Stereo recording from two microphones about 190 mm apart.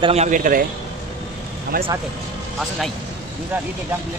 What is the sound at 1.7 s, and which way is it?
Speech, 45° right (ahead or behind).